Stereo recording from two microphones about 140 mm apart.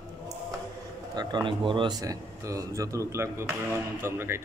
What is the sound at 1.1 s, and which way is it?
Speech, 35° right (ahead or behind).